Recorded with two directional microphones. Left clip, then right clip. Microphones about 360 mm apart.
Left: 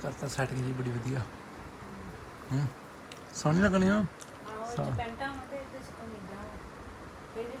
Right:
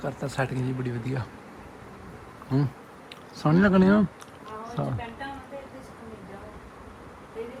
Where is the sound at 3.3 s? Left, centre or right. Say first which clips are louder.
Right 6 dB; centre.